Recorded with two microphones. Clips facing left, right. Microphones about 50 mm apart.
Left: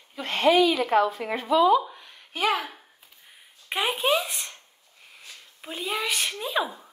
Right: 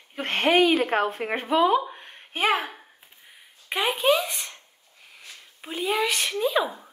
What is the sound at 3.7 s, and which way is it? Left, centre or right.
Speech, centre.